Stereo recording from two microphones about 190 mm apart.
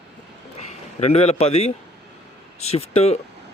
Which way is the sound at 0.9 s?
35° left (ahead or behind).